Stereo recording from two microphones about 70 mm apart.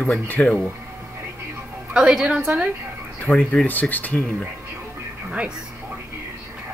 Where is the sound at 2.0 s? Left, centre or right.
Centre.